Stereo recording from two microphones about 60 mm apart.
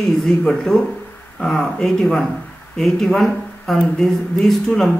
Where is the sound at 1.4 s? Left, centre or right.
Centre.